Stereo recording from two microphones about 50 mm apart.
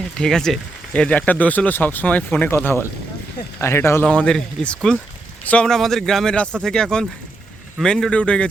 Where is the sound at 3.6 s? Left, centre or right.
Left.